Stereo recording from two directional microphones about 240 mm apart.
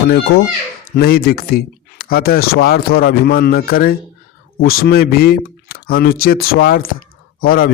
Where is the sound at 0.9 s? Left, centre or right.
Left.